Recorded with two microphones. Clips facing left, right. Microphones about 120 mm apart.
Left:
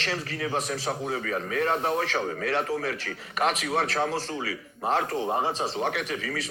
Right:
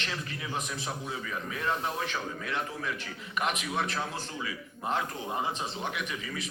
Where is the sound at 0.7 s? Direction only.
55° left (ahead or behind); by 2.1 s 80° left.